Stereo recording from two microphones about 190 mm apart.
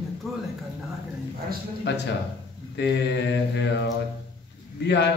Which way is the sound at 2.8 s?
65° left (ahead or behind).